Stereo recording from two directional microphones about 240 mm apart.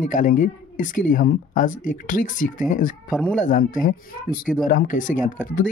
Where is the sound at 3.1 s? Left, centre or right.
Centre.